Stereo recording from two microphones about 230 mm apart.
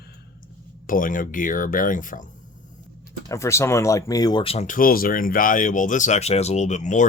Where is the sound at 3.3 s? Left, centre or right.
Centre.